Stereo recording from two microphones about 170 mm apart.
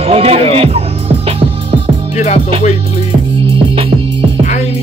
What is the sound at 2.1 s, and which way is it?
Music, 40° left (ahead or behind).